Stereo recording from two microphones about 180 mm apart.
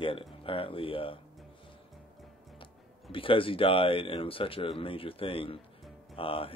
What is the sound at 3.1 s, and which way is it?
Speech, 30° left (ahead or behind).